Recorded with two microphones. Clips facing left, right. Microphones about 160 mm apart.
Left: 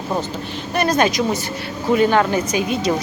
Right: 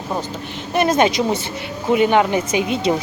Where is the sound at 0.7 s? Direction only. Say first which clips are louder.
Right 2 dB; 20° right (ahead or behind).